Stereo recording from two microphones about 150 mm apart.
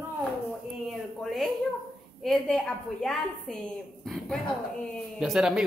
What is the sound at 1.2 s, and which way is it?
Speech, centre (ahead or behind).